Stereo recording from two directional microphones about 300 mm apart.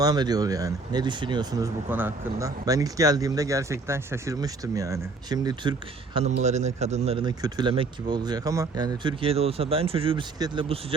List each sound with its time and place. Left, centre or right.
0.0 s speech: centre